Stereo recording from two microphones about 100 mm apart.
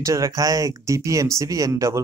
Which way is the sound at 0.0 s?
35° right (ahead or behind).